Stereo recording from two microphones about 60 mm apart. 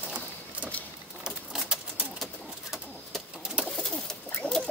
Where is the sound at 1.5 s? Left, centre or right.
Centre.